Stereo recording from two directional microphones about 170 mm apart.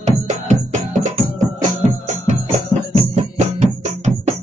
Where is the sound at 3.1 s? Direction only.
40° right (ahead or behind).